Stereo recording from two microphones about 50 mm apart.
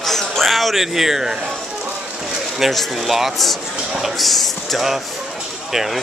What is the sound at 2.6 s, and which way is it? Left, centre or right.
Speech, centre.